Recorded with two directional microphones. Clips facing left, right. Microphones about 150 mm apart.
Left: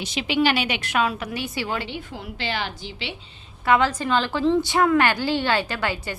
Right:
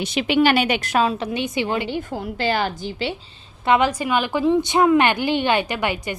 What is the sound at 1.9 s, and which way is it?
A woman's voice, 45° right (ahead or behind).